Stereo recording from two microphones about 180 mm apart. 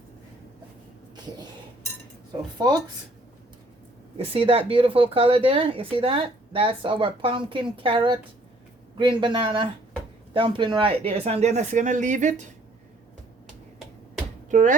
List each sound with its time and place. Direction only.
4.2 s speech: 30° right (ahead or behind)
14.5 s speech: 45° right (ahead or behind)